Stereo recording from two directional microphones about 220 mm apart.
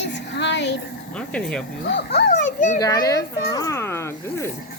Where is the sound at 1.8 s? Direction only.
50° left (ahead or behind).